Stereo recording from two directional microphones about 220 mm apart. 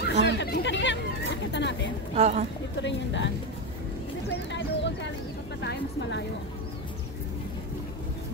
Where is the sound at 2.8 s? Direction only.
55° left (ahead or behind).